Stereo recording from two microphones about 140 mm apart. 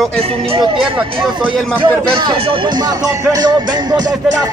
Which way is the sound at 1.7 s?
40° right (ahead or behind).